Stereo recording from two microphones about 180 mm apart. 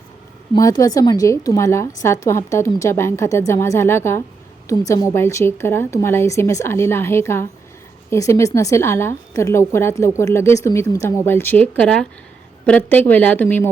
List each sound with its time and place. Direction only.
0.5 s a woman's voice: 20° left (ahead or behind)